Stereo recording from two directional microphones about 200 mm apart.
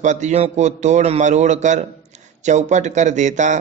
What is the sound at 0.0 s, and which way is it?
A man's voice, 35° right (ahead or behind).